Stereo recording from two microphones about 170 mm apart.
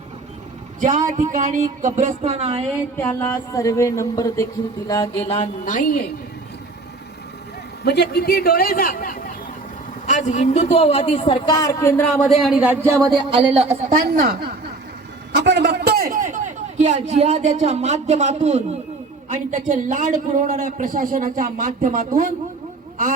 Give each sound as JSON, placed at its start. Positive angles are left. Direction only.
{"t": 0.8, "sound": "speech", "side_deg": -45}
{"t": 3.0, "sound": "speech", "side_deg": 15}
{"t": 5.3, "sound": "a woman's voice", "side_deg": 45}
{"t": 7.9, "sound": "a man's voice", "side_deg": 75}
{"t": 12.4, "sound": "speech", "side_deg": -5}
{"t": 13.1, "sound": "speech", "side_deg": -35}
{"t": 14.2, "sound": "a woman's voice", "side_deg": -65}
{"t": 15.4, "sound": "a man's voice", "side_deg": -90}